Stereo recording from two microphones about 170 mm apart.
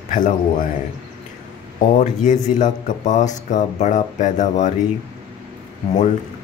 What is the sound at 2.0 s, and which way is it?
Speech, 45° left (ahead or behind).